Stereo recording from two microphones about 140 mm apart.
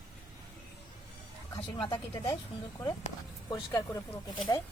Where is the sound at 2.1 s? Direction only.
25° left (ahead or behind).